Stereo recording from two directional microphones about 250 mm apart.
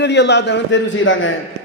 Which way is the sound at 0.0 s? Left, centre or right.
Left.